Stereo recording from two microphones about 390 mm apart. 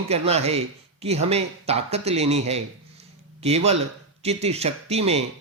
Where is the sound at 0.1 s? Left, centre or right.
Centre.